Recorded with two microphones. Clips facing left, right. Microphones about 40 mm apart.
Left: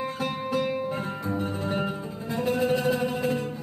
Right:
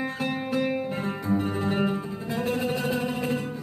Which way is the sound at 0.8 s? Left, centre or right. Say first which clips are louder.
Right 2 dB; centre.